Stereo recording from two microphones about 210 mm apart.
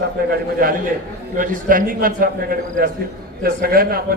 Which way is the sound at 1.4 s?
40° right (ahead or behind).